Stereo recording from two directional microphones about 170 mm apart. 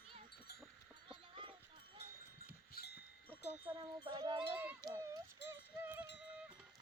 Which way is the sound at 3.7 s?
20° right (ahead or behind).